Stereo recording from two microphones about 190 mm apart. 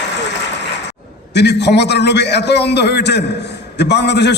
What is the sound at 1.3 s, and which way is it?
A man's voice, 65° left (ahead or behind).